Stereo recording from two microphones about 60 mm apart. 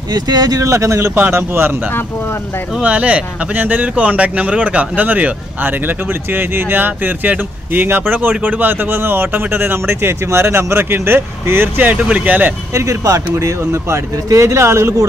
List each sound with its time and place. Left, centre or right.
0.1 s speech: right
0.7 s speech: right
1.3 s speech: right
2.8 s speech: right
12.7 s speech: right